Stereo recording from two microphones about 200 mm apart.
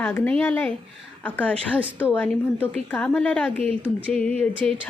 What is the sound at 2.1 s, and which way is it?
A woman's voice, 10° left (ahead or behind).